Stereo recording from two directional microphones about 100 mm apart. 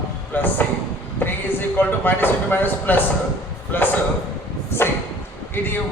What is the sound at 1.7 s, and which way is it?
A man's voice, 20° left (ahead or behind).